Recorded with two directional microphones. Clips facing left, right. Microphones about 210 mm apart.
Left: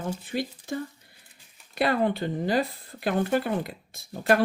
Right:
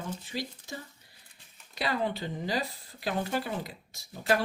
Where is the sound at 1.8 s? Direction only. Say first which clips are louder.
Left 7 dB; 55° left (ahead or behind).